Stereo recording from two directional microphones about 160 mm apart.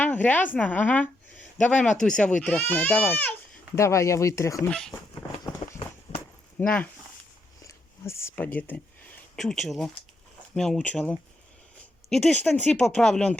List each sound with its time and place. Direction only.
0.0 s a woman's voice: 10° left (ahead or behind)
4.7 s speech: 5° left (ahead or behind)
5.6 s run: 40° left (ahead or behind)
6.1 s a sound: 40° left (ahead or behind)
6.6 s speech: 10° left (ahead or behind)
7.6 s a sound: 15° left (ahead or behind)
8.5 s speech: 10° left (ahead or behind)